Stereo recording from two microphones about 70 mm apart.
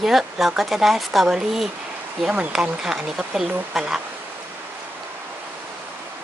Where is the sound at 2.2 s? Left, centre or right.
Centre.